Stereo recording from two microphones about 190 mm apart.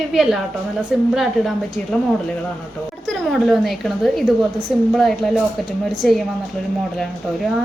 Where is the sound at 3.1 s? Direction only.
Centre (ahead or behind).